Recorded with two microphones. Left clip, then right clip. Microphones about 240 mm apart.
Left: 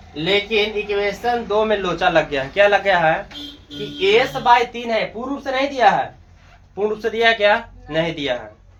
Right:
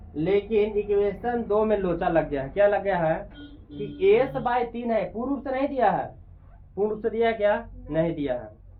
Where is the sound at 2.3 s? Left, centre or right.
Centre.